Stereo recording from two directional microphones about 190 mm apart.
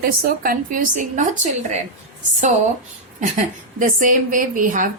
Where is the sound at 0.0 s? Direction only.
50° right (ahead or behind).